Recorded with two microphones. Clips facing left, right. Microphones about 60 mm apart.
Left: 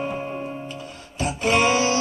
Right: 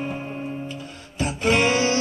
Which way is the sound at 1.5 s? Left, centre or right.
Centre.